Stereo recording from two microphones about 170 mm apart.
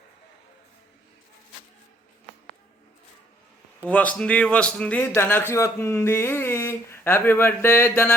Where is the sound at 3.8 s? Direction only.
10° left (ahead or behind).